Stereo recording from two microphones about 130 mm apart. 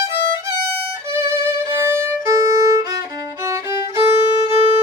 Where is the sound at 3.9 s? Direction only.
25° right (ahead or behind).